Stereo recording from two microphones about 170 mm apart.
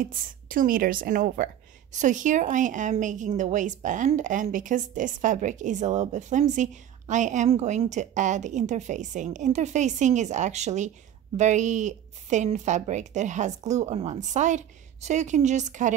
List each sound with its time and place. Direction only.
0.0 s a woman's voice: 55° right (ahead or behind)